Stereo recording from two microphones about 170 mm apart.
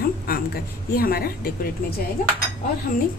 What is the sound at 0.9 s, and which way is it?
Speech, 60° left (ahead or behind).